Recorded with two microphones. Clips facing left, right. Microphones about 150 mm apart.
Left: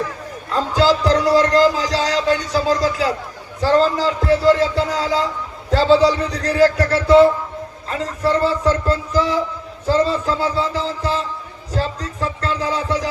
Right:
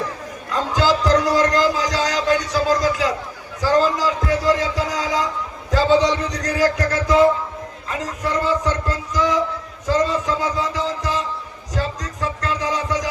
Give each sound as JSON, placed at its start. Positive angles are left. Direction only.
{"t": 0.5, "sound": "a man's voice", "side_deg": 30}